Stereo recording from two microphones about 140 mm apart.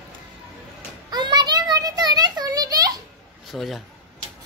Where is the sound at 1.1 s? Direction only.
30° right (ahead or behind).